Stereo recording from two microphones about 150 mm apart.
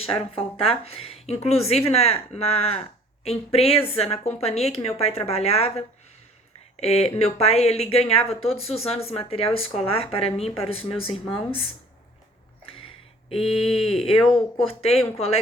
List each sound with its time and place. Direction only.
0.2 s a woman's voice: 40° left (ahead or behind)
13.4 s speech: centre (ahead or behind)
13.8 s a woman's voice: 40° left (ahead or behind)